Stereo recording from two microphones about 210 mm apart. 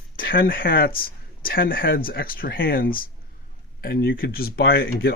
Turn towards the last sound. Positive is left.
turn(degrees=45)  # may be behind; listen again after turning